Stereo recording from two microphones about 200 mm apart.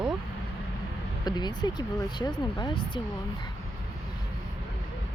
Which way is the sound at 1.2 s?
20° left (ahead or behind).